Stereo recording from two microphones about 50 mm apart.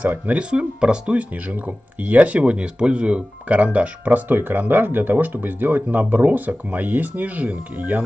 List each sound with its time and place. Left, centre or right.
0.0 s speech: right
0.4 s speech: right